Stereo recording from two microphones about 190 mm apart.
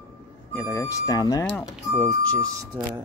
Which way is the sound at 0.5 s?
15° left (ahead or behind).